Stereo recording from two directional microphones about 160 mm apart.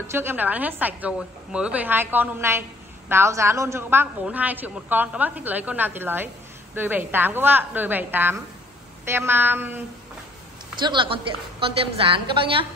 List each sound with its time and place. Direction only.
0.1 s a woman's voice: 15° right (ahead or behind)
10.8 s a woman's voice: 30° right (ahead or behind)